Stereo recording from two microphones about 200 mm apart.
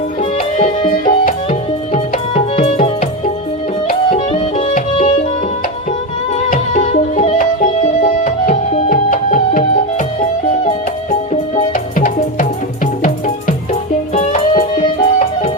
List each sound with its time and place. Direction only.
0.2 s music: 30° left (ahead or behind)
1.0 s tabla: 40° left (ahead or behind)
4.3 s music: 30° left (ahead or behind)
6.3 s music: 40° left (ahead or behind)
10.7 s music: 35° left (ahead or behind)